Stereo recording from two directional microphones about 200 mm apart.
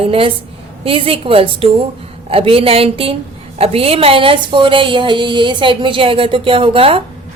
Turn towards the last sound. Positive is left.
turn(degrees=-25)  # may be behind; listen again after turning